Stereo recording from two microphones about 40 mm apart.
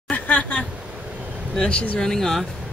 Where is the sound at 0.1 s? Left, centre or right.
Left.